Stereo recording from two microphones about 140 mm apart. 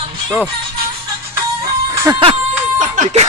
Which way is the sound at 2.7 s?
65° right (ahead or behind).